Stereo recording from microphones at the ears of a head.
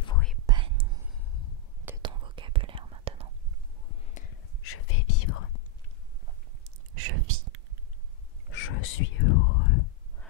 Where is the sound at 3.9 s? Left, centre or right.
Left.